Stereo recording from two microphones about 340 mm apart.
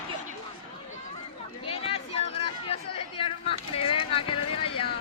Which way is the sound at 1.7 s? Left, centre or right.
Centre.